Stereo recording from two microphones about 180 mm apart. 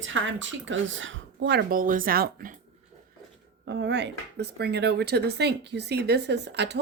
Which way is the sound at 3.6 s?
75° right (ahead or behind).